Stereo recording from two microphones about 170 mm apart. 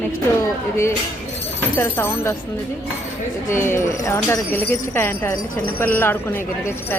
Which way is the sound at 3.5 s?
15° left (ahead or behind).